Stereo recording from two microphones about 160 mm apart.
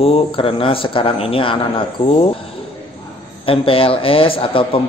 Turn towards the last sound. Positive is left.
turn(degrees=35)  # may be behind; listen again after turning